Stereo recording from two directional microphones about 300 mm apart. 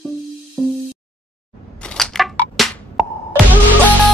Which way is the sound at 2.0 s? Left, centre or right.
Centre.